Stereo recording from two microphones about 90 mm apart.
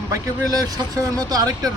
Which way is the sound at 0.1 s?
40° right (ahead or behind).